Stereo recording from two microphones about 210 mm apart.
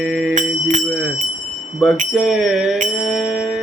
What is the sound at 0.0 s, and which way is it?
Music, 10° right (ahead or behind).